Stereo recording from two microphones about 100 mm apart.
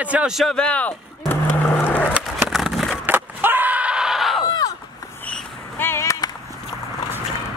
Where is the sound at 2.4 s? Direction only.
5° right (ahead or behind).